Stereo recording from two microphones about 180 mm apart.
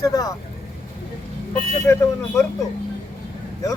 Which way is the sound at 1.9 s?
15° left (ahead or behind).